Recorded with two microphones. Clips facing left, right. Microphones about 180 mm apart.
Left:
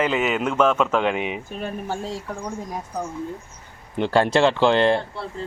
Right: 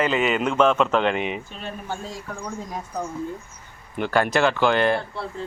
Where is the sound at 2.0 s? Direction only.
30° left (ahead or behind).